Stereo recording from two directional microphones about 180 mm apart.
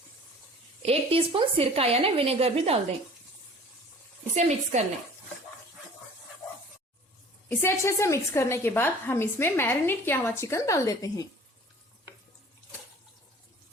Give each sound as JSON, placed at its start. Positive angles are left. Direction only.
{"t": 0.8, "sound": "a woman's voice", "side_deg": -35}
{"t": 4.4, "sound": "a woman's voice", "side_deg": -40}
{"t": 7.4, "sound": "a woman's voice", "side_deg": 15}